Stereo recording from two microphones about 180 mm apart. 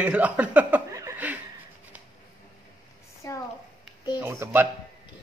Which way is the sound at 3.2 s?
15° left (ahead or behind).